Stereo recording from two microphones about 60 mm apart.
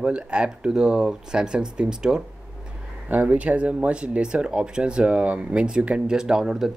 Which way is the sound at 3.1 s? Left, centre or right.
Right.